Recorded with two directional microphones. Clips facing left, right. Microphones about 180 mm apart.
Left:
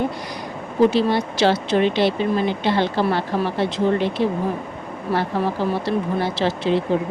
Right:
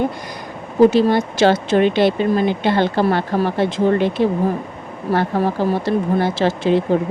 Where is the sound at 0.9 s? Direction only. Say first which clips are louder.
Right 4 dB; 45° right (ahead or behind).